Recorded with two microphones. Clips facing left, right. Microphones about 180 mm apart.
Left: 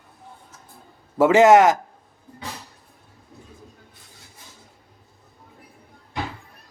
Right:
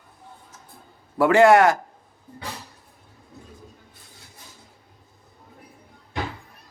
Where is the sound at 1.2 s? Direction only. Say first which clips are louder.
Left 2 dB; 20° left (ahead or behind).